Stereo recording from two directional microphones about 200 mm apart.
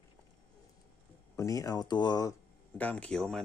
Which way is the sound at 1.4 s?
15° left (ahead or behind).